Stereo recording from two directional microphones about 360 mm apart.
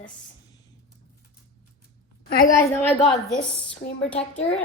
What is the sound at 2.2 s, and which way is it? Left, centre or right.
Speech, left.